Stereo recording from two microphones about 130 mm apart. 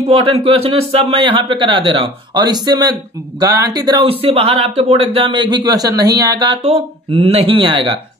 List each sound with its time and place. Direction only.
0.0 s speech: 45° right (ahead or behind)